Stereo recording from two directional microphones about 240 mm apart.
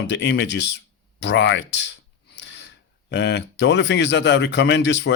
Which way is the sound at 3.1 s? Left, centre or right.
Left.